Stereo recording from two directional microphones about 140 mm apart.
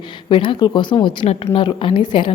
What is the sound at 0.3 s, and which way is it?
A woman's voice, 35° left (ahead or behind).